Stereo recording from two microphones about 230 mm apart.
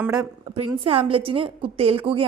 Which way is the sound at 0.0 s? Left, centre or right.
Centre.